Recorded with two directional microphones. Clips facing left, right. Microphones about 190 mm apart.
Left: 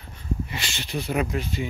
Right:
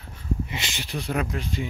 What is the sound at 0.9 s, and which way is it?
Speech, 5° left (ahead or behind).